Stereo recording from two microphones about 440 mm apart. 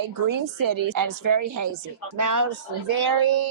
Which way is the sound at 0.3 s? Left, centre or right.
Right.